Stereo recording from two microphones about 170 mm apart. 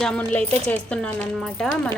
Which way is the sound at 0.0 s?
5° left (ahead or behind).